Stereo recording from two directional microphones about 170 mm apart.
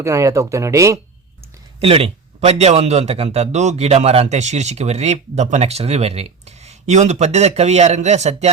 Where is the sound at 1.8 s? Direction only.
35° right (ahead or behind).